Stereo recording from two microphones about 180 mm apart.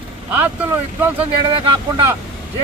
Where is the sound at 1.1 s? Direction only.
30° right (ahead or behind).